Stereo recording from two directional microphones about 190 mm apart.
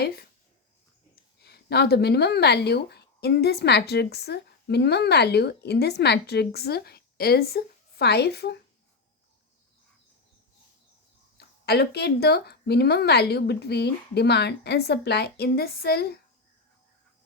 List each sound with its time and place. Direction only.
0.0 s a woman's voice: 55° left (ahead or behind)
11.3 s speech: 55° left (ahead or behind)